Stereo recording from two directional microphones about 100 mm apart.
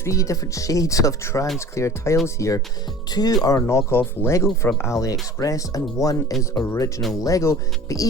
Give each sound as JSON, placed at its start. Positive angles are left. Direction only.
{"t": 0.0, "sound": "speech", "side_deg": 30}